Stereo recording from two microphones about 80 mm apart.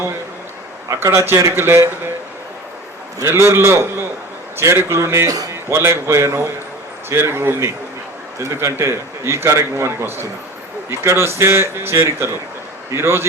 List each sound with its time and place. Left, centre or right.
0.9 s speech: right
3.2 s speech: right